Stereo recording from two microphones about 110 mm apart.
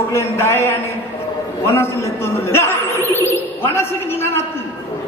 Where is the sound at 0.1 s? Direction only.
25° left (ahead or behind).